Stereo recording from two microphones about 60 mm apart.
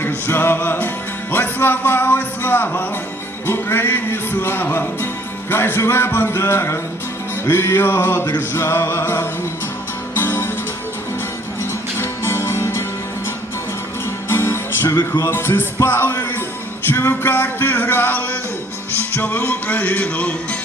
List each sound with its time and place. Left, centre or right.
0.0 s music: left
5.5 s a sound: left
7.4 s music: left
11.9 s music: left
14.3 s music: left
14.8 s music: left
15.3 s a sound: left
19.1 s music: left